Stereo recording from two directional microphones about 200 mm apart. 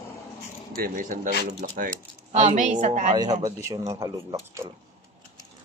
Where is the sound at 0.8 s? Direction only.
45° right (ahead or behind).